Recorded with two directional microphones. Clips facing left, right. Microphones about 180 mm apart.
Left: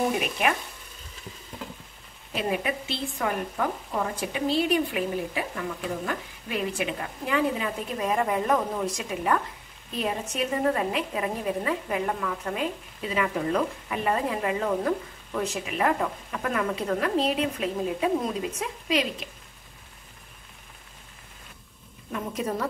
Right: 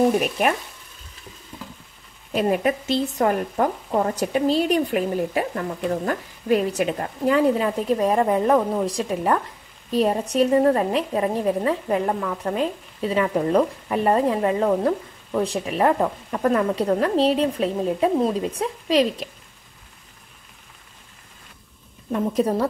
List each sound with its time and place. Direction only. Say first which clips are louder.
0.2 s speech: right 5 dB; 45° right (ahead or behind)
2.3 s speech: right 7 dB; 45° right (ahead or behind)
22.1 s speech: right 9 dB; 35° right (ahead or behind)